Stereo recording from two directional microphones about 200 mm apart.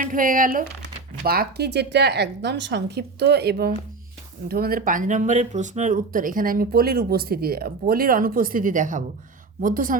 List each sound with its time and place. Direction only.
0.0 s a woman's voice: 45° right (ahead or behind)